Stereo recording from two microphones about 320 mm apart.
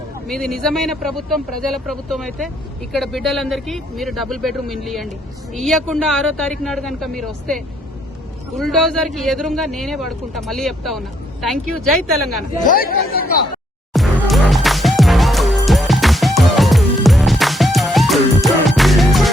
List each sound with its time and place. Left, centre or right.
0.3 s a man's voice: centre
12.6 s speech: left
13.9 s music: centre